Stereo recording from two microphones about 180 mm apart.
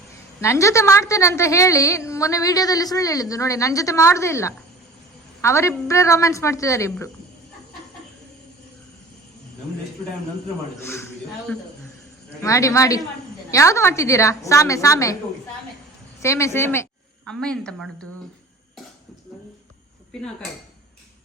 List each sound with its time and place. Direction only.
0.4 s a woman's voice: 15° left (ahead or behind)
10.8 s a woman's voice: 15° left (ahead or behind)
16.2 s a woman's voice: 15° left (ahead or behind)